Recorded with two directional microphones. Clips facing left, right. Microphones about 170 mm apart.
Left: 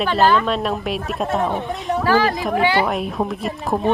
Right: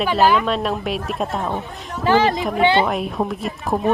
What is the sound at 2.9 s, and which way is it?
Speech, centre (ahead or behind).